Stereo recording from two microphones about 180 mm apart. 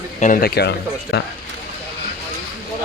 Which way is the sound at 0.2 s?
50° left (ahead or behind).